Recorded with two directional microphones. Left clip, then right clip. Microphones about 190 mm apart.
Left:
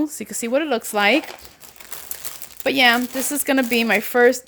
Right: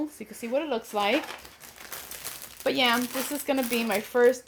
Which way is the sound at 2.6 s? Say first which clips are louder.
Left 8 dB; 50° left (ahead or behind).